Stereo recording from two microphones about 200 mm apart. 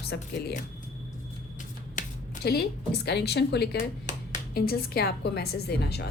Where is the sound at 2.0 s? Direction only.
45° left (ahead or behind).